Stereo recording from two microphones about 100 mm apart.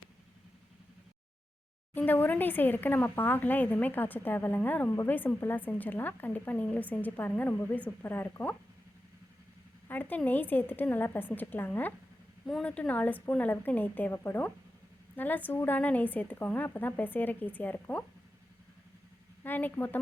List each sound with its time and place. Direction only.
2.0 s speech: 20° left (ahead or behind)
9.9 s speech: 20° left (ahead or behind)
12.5 s a woman's voice: 5° left (ahead or behind)
19.5 s speech: 20° left (ahead or behind)